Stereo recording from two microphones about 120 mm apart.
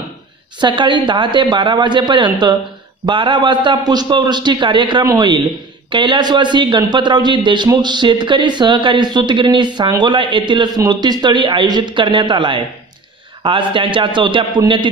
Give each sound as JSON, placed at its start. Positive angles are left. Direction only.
{"t": 0.6, "sound": "a man's voice", "side_deg": -40}